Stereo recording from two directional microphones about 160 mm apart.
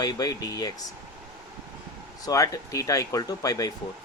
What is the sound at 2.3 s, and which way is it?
Speech, 20° left (ahead or behind).